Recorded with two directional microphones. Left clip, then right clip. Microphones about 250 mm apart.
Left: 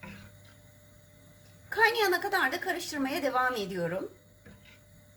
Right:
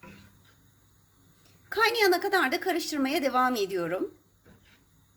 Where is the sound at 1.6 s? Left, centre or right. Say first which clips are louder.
Right 2 dB; right.